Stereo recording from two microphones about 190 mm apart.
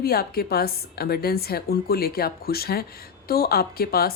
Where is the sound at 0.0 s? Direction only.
55° left (ahead or behind).